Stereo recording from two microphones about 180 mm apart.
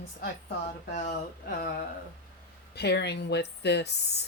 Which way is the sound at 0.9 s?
45° left (ahead or behind).